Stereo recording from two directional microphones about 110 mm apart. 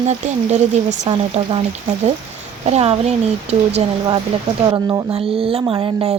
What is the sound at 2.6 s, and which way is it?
A woman's voice, 65° right (ahead or behind).